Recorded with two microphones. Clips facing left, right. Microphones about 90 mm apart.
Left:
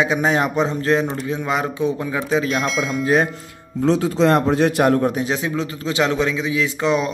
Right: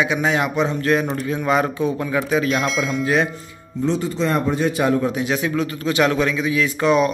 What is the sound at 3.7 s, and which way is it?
Speech, 90° left.